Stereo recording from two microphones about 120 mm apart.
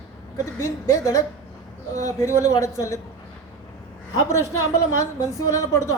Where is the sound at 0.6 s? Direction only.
30° left (ahead or behind).